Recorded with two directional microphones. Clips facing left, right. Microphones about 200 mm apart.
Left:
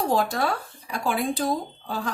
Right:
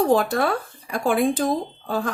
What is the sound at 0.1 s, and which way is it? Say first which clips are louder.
Speech: right 4 dB; 55° right (ahead or behind).